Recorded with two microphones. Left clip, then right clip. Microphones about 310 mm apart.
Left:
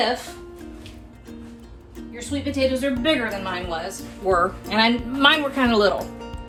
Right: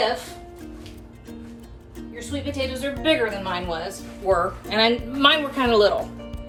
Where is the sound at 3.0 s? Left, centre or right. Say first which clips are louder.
Right 1 dB; left.